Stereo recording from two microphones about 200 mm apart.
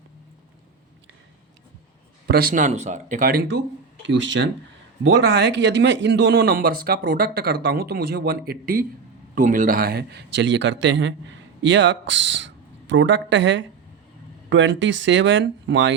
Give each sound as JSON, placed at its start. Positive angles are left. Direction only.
{"t": 2.2, "sound": "speech", "side_deg": -50}
{"t": 4.0, "sound": "a man's voice", "side_deg": -65}